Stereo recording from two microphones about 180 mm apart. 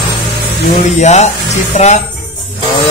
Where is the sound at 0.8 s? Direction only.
40° left (ahead or behind).